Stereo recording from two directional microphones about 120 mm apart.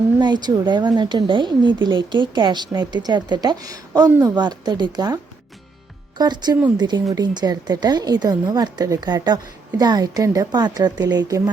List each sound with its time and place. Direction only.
0.2 s a woman's voice: 35° right (ahead or behind)